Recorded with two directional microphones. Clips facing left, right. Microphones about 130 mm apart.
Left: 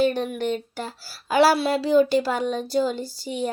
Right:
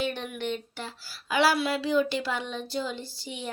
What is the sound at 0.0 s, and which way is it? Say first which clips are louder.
Speech: left 9 dB; 40° left (ahead or behind).